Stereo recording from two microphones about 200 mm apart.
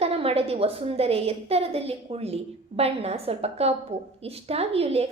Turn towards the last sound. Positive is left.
turn(degrees=-30)  # may be behind; listen again after turning